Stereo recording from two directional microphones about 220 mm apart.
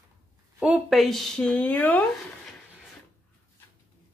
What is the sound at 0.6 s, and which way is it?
A woman's voice, 5° right (ahead or behind).